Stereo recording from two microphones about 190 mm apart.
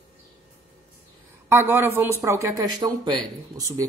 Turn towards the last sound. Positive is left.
turn(degrees=-20)  # may be behind; listen again after turning